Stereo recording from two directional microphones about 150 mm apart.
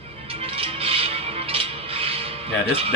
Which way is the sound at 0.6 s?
40° right (ahead or behind).